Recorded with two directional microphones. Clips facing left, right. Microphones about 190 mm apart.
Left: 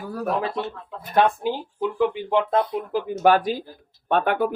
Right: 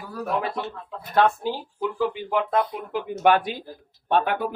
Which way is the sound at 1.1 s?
15° left (ahead or behind).